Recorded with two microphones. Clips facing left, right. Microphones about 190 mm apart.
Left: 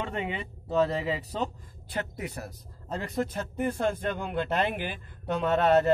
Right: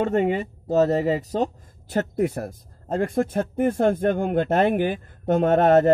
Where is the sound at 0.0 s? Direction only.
45° right (ahead or behind).